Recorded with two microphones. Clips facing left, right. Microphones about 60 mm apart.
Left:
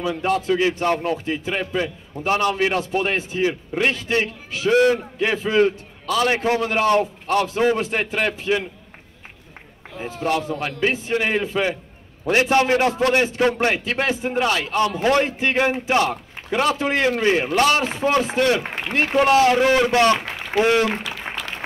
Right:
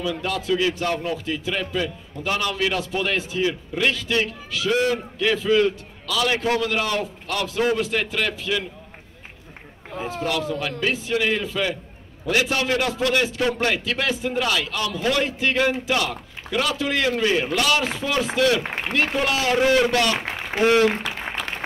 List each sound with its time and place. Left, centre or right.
0.0 s a man's voice: left
10.2 s a man's voice: left
20.2 s a man's voice: right
21.0 s applause: right
21.4 s applause: right